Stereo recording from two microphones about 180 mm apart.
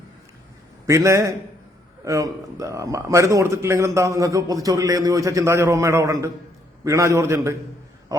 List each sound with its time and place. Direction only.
0.9 s a man's voice: 15° right (ahead or behind)